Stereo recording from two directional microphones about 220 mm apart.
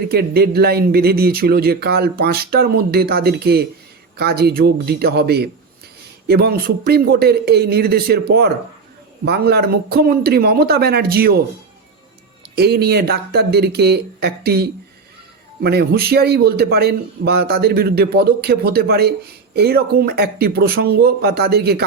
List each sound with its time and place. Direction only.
0.1 s a man's voice: 45° right (ahead or behind)
12.5 s a man's voice: 45° right (ahead or behind)